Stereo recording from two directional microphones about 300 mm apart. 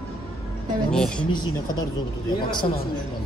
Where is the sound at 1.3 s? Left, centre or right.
Centre.